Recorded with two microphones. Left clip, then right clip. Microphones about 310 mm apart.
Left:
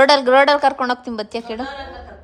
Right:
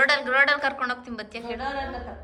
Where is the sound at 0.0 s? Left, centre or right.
Centre.